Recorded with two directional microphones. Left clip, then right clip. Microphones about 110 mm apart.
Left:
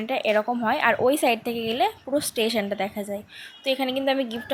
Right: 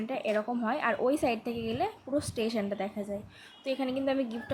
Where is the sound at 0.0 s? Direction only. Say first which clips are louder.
Left 8 dB; 15° left (ahead or behind).